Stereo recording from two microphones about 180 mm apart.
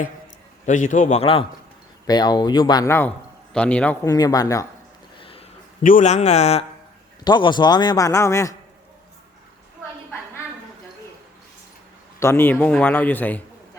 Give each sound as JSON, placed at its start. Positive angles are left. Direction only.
{"t": 0.6, "sound": "a man's voice", "side_deg": 45}
{"t": 4.1, "sound": "a man's voice", "side_deg": 20}
{"t": 5.2, "sound": "a sound", "side_deg": 30}
{"t": 5.8, "sound": "a man's voice", "side_deg": 45}
{"t": 7.3, "sound": "a man's voice", "side_deg": 25}
{"t": 12.2, "sound": "a man's voice", "side_deg": 10}